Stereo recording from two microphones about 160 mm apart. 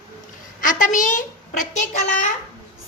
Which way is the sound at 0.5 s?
55° left (ahead or behind).